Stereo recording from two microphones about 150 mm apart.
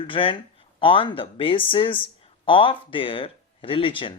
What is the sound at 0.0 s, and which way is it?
Speech, 35° left (ahead or behind).